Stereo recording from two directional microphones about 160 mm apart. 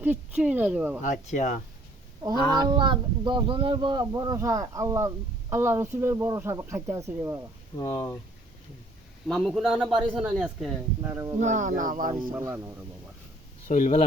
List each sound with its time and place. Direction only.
0.0 s speech: 10° right (ahead or behind)
1.0 s speech: 50° left (ahead or behind)
2.5 s speech: 25° right (ahead or behind)
7.8 s speech: 25° left (ahead or behind)
9.2 s a man's voice: centre (ahead or behind)
11.0 s speech: 20° right (ahead or behind)
11.3 s speech: 50° right (ahead or behind)
12.4 s speech: 15° right (ahead or behind)
13.7 s speech: 50° left (ahead or behind)